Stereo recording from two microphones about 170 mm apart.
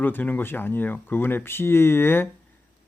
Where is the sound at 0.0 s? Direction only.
10° left (ahead or behind).